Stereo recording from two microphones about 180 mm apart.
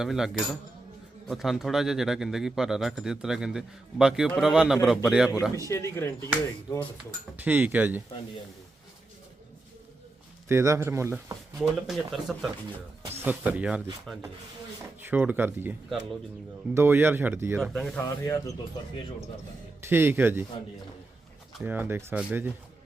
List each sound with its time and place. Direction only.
0.0 s speech: 5° right (ahead or behind)
5.5 s speech: 15° left (ahead or behind)
7.3 s speech: 10° right (ahead or behind)
10.5 s speech: 15° right (ahead or behind)
11.5 s speech: centre (ahead or behind)
15.1 s speech: 10° right (ahead or behind)
16.7 s speech: 15° right (ahead or behind)
17.6 s speech: 5° left (ahead or behind)
18.0 s speech: 20° left (ahead or behind)
19.9 s speech: 10° right (ahead or behind)
21.6 s speech: 10° right (ahead or behind)